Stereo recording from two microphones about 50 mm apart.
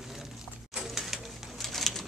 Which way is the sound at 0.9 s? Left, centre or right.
Centre.